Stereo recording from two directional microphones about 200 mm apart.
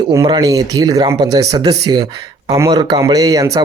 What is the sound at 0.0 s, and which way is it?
Speech, 20° right (ahead or behind).